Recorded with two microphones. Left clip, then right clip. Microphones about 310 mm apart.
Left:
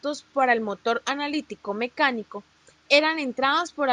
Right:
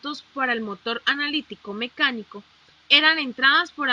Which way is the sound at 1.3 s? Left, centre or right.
Left.